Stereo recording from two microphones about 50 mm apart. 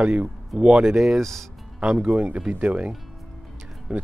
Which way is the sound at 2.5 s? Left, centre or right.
Right.